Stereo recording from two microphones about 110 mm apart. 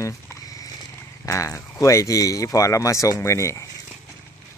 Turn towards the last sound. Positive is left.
turn(degrees=25)  # may be behind; listen again after turning